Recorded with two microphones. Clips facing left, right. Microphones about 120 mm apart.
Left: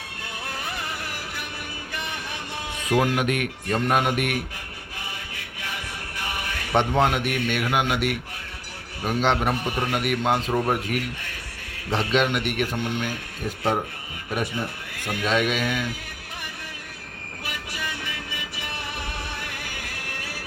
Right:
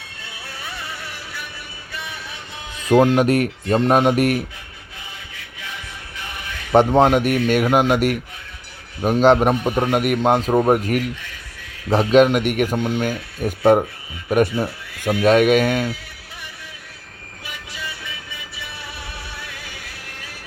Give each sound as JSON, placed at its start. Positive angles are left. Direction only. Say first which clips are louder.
{"t": 3.0, "sound": "a man's voice", "louder": "right 9 dB", "side_deg": -35}
{"t": 6.7, "sound": "a man's voice", "louder": "right 8 dB", "side_deg": -40}